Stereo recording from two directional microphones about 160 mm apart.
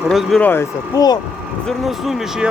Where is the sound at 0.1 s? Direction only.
Centre (ahead or behind).